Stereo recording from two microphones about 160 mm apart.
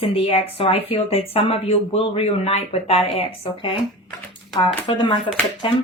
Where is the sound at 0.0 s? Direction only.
40° left (ahead or behind).